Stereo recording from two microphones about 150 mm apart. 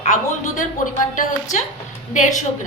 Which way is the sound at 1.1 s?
60° left (ahead or behind).